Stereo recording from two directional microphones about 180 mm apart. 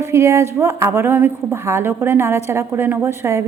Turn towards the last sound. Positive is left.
turn(degrees=-15)  # may be behind; listen again after turning